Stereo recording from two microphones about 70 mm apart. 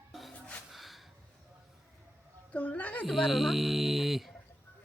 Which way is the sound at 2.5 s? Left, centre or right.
Left.